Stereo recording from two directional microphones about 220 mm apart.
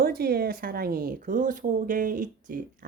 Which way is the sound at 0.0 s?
45° right (ahead or behind).